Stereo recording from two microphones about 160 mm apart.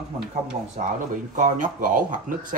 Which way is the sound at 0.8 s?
50° right (ahead or behind).